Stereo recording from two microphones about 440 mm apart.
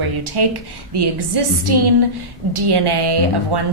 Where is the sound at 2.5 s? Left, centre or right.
Right.